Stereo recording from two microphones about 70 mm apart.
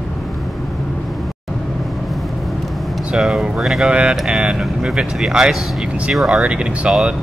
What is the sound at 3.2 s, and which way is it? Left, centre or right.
Speech, centre.